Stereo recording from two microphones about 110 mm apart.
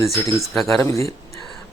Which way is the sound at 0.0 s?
25° left (ahead or behind).